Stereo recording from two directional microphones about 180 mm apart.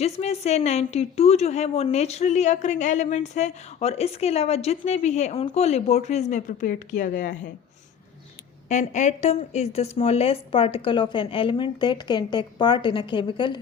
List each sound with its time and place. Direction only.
0.0 s a woman's voice: 35° left (ahead or behind)
8.7 s a woman's voice: 40° left (ahead or behind)